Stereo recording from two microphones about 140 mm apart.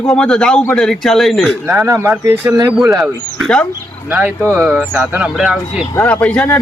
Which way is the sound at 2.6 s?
5° right (ahead or behind).